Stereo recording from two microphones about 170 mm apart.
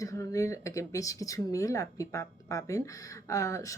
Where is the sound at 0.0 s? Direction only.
20° left (ahead or behind).